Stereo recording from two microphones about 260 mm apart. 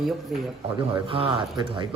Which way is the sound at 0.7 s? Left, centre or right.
Right.